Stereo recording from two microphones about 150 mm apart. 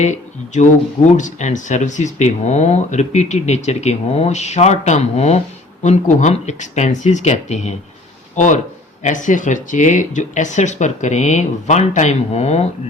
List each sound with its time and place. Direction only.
0.0 s speech: 55° left (ahead or behind)